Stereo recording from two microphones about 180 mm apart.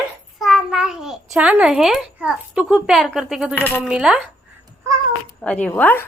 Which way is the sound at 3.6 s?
10° left (ahead or behind).